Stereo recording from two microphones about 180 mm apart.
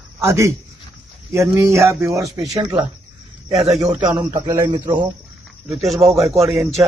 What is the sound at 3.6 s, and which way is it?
Speech, 5° right (ahead or behind).